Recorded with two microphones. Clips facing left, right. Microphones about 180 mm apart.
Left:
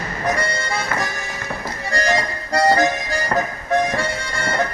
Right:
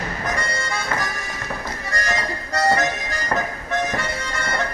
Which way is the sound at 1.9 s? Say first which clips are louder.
Left 6 dB; 30° left (ahead or behind).